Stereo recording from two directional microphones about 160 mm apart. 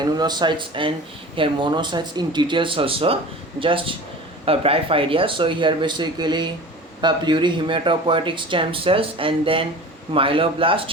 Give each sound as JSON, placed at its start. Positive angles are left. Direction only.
{"t": 0.0, "sound": "speech", "side_deg": -25}